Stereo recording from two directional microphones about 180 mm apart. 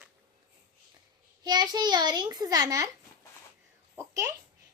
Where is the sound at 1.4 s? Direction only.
25° right (ahead or behind).